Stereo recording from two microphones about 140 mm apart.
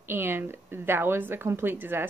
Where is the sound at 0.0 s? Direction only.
15° right (ahead or behind).